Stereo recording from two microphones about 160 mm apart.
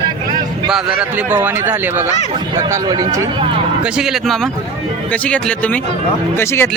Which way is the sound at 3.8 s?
5° right (ahead or behind).